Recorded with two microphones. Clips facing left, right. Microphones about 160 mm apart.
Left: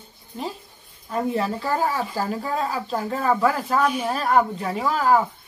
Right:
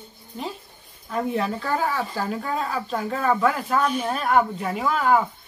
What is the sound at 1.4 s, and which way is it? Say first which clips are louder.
Speech: left 1 dB; 10° left (ahead or behind).